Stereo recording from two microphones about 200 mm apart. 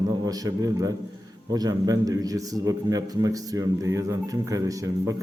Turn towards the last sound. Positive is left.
turn(degrees=-15)  # may be behind; listen again after turning